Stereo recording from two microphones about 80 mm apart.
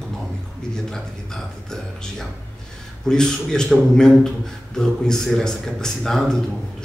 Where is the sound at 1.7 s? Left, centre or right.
Centre.